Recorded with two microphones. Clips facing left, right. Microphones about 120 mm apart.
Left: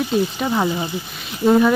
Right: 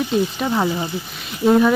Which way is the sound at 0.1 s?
Centre (ahead or behind).